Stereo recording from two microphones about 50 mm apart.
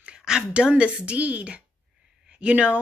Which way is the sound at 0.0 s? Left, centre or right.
Centre.